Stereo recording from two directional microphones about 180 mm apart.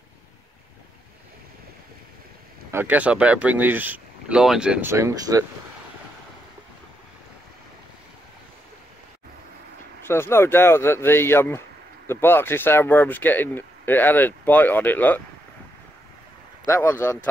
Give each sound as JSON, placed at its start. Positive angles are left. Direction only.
{"t": 2.7, "sound": "speech", "side_deg": -10}
{"t": 4.9, "sound": "speech", "side_deg": -15}
{"t": 10.0, "sound": "speech", "side_deg": 15}
{"t": 16.6, "sound": "speech", "side_deg": 15}